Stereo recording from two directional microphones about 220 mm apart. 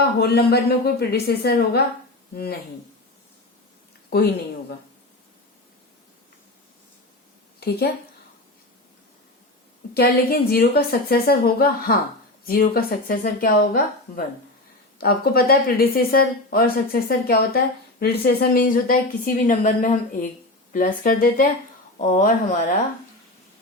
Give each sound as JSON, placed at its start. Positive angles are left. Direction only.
{"t": 0.0, "sound": "speech", "side_deg": 45}
{"t": 4.1, "sound": "speech", "side_deg": 45}
{"t": 7.6, "sound": "a woman's voice", "side_deg": 45}
{"t": 9.9, "sound": "speech", "side_deg": 45}
{"t": 14.9, "sound": "speech", "side_deg": 45}